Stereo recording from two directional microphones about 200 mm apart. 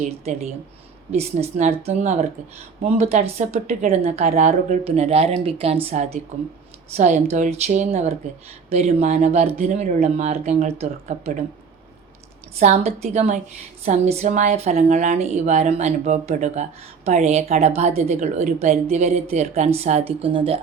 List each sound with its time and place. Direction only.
1.1 s a woman's voice: 30° right (ahead or behind)
12.5 s a woman's voice: 35° right (ahead or behind)